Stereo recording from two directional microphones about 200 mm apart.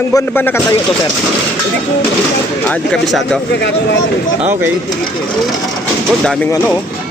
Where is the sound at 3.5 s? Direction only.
60° left (ahead or behind).